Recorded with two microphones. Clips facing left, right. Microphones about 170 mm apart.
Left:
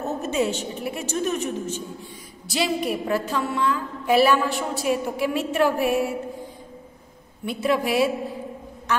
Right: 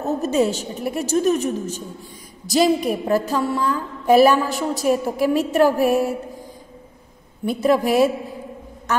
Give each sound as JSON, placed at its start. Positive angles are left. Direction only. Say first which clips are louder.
{"t": 0.2, "sound": "a woman's voice", "louder": "right 4 dB", "side_deg": -40}
{"t": 7.4, "sound": "a woman's voice", "louder": "right 5 dB", "side_deg": -40}